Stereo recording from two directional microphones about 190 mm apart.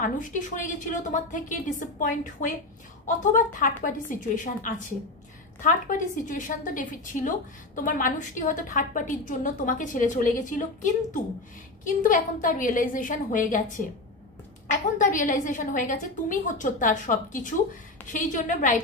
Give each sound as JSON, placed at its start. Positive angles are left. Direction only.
{"t": 0.0, "sound": "a woman's voice", "side_deg": 40}
{"t": 15.0, "sound": "a woman's voice", "side_deg": 45}